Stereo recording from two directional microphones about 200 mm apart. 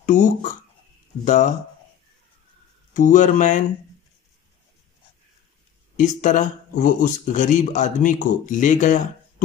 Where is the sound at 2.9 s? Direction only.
40° left (ahead or behind).